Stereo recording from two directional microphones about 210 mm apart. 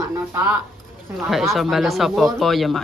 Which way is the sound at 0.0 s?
10° right (ahead or behind).